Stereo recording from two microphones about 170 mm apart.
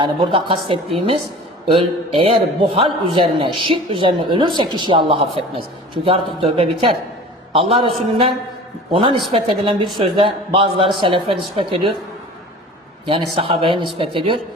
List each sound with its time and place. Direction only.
0.0 s a man's voice: 30° right (ahead or behind)
13.1 s a man's voice: 30° right (ahead or behind)